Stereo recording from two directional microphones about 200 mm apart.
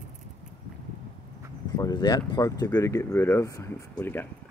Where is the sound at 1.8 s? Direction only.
20° left (ahead or behind).